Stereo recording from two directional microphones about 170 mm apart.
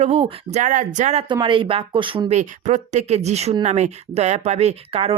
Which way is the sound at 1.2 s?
30° right (ahead or behind).